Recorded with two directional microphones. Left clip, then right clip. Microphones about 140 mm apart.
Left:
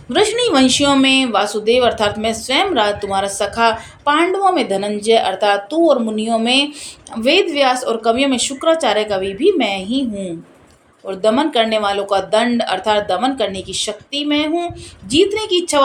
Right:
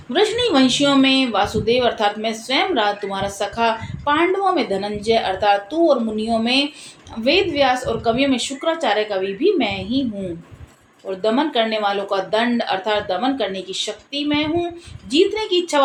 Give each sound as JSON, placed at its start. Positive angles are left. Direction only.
{"t": 0.1, "sound": "speech", "side_deg": 30}
{"t": 11.1, "sound": "speech", "side_deg": 40}